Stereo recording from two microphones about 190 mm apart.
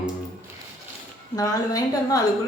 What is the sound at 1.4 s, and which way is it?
Speech, 20° left (ahead or behind).